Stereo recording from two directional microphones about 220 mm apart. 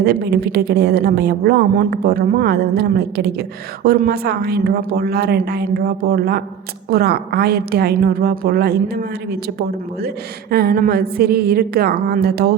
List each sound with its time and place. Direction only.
0.0 s a woman's voice: 45° right (ahead or behind)
10.5 s a woman's voice: 45° right (ahead or behind)